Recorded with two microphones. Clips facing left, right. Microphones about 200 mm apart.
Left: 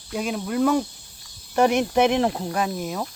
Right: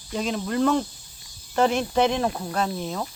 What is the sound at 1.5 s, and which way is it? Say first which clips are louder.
Speech: left 2 dB; 15° left (ahead or behind).